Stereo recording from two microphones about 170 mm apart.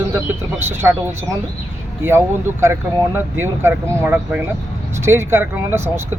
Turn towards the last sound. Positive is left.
turn(degrees=-15)  # may be behind; listen again after turning